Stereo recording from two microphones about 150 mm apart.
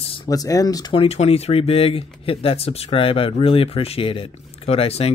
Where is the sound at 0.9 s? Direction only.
45° left (ahead or behind).